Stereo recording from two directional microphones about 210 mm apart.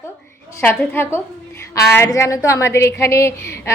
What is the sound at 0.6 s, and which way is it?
A woman's voice, 10° left (ahead or behind).